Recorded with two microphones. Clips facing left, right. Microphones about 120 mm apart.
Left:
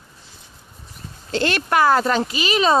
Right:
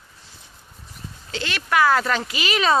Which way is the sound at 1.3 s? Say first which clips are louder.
Left 5 dB; 50° left (ahead or behind).